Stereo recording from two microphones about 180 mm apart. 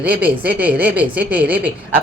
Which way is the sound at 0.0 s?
10° right (ahead or behind).